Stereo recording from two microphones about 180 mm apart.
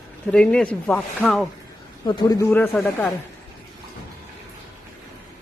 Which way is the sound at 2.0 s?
25° left (ahead or behind).